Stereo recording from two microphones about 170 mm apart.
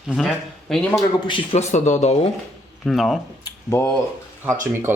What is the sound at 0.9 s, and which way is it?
Speech, 30° left (ahead or behind).